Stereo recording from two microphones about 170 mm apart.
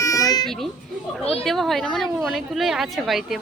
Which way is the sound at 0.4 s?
Centre (ahead or behind).